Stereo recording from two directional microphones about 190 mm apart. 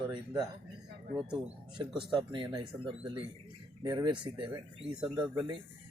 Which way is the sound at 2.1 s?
25° right (ahead or behind).